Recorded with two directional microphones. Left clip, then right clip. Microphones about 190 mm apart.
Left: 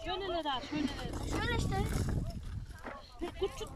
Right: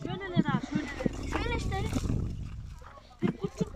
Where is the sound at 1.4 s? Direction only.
15° right (ahead or behind).